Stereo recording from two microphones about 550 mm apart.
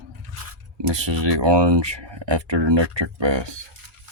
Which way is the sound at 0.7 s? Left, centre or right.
Right.